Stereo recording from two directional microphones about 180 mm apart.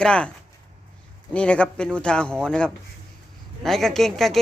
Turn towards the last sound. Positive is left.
turn(degrees=0)  # may be behind; listen again after turning